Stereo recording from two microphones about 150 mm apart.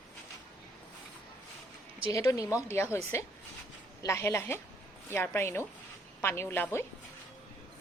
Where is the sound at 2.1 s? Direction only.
20° left (ahead or behind).